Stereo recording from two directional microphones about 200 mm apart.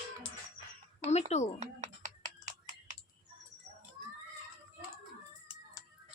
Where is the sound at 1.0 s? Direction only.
35° left (ahead or behind).